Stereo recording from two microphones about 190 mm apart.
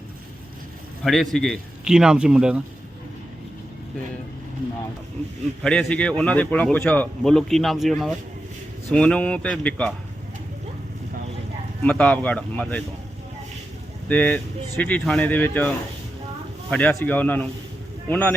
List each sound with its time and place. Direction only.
1.0 s a man's voice: centre (ahead or behind)
5.6 s a man's voice: 5° left (ahead or behind)
11.8 s speech: 5° left (ahead or behind)
14.1 s speech: 10° left (ahead or behind)